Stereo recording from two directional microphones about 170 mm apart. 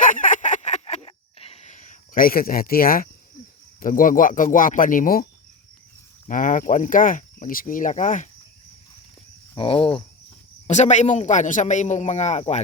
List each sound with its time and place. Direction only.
0.0 s a sound: 50° left (ahead or behind)
3.8 s speech: 55° left (ahead or behind)
9.6 s speech: 30° left (ahead or behind)
10.7 s speech: 45° left (ahead or behind)